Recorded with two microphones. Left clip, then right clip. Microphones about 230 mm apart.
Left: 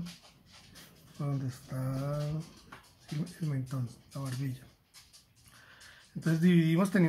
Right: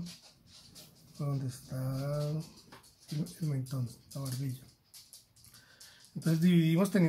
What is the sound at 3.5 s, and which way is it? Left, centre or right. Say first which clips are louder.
Speech: left 1 dB; centre.